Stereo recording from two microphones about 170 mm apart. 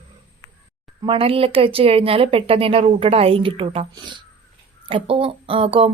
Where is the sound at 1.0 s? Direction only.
30° right (ahead or behind).